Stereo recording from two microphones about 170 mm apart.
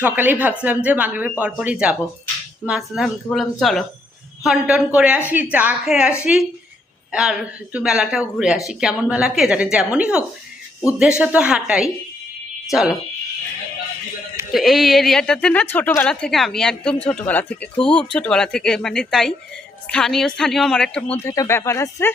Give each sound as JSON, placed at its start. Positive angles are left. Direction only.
{"t": 0.0, "sound": "a woman's voice", "side_deg": -10}
{"t": 14.5, "sound": "a woman's voice", "side_deg": 0}